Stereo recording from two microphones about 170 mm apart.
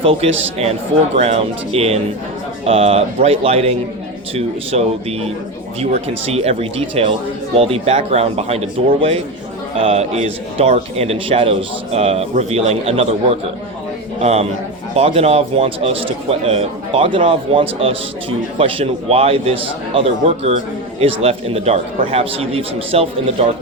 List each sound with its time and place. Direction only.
0.0 s a man's voice: 35° right (ahead or behind)